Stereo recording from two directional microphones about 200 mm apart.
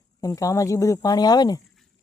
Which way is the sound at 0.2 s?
15° left (ahead or behind).